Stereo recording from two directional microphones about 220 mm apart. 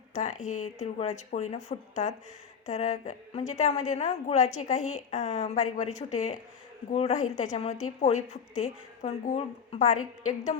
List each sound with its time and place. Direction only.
0.1 s a woman's voice: 30° left (ahead or behind)